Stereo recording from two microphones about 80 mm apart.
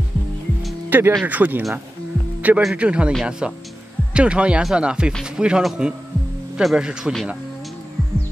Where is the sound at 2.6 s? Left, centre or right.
Centre.